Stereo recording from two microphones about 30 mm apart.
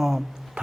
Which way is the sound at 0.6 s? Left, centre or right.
Right.